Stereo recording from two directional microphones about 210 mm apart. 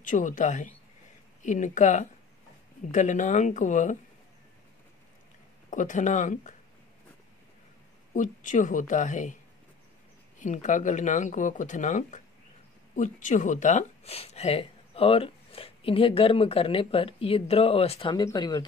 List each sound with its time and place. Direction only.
0.0 s speech: 35° left (ahead or behind)
5.7 s speech: 35° left (ahead or behind)
8.1 s speech: 35° left (ahead or behind)
10.4 s speech: 35° left (ahead or behind); by 18.7 s 20° left (ahead or behind)